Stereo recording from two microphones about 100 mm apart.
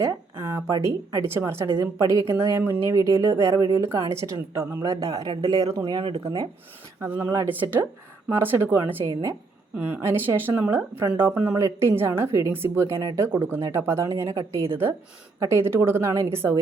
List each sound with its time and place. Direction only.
0.0 s a woman's voice: 25° right (ahead or behind)
4.8 s speech: 40° right (ahead or behind)
5.8 s speech: 60° right (ahead or behind)
7.0 s a woman's voice: 25° right (ahead or behind)
11.5 s a woman's voice: 25° right (ahead or behind)